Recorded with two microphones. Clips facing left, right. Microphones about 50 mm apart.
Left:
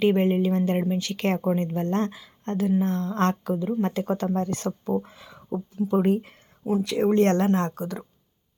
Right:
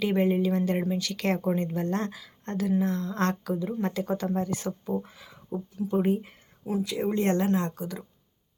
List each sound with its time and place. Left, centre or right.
0.0 s speech: left
4.4 s speech: left
7.0 s speech: left
7.4 s speech: left